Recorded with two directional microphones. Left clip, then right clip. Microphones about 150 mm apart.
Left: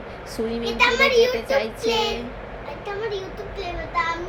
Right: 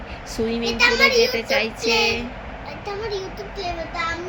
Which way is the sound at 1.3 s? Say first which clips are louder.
Right 1 dB; 20° right (ahead or behind).